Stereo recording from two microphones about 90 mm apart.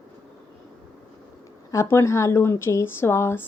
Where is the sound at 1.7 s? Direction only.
30° left (ahead or behind).